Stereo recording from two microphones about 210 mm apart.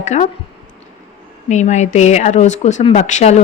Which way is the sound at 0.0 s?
35° left (ahead or behind).